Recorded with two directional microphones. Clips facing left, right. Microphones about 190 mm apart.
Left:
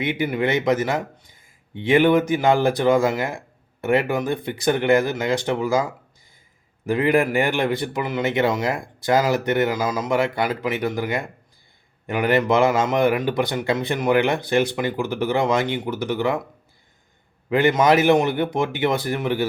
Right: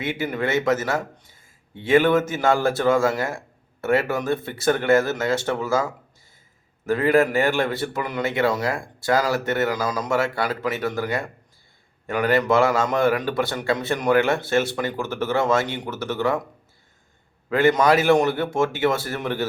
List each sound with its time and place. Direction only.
0.0 s a man's voice: 20° left (ahead or behind)
17.5 s a man's voice: 20° left (ahead or behind)